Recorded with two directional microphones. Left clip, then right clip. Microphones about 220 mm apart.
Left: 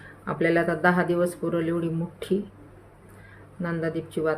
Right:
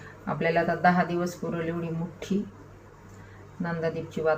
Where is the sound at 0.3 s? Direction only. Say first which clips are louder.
Left 2 dB; 45° left (ahead or behind).